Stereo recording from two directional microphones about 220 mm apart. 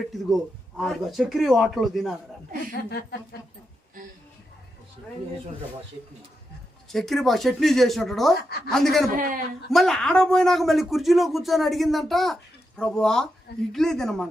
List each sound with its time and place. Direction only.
0.1 s speech: centre (ahead or behind)
6.9 s speech: centre (ahead or behind)
9.1 s a man's voice: 40° right (ahead or behind)
9.7 s speech: centre (ahead or behind)